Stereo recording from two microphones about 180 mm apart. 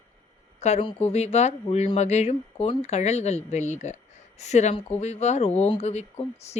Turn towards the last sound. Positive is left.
turn(degrees=35)  # may be behind; listen again after turning